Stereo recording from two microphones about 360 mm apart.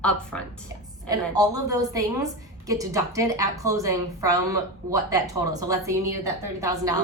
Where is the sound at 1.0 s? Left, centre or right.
Centre.